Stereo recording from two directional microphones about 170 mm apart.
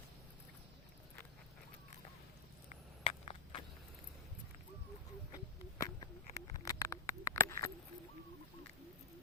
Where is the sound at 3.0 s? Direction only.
35° left (ahead or behind).